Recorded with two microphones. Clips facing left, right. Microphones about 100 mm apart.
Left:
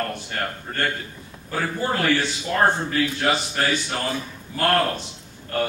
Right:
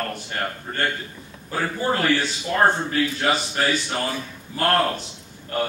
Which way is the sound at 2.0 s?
15° right (ahead or behind).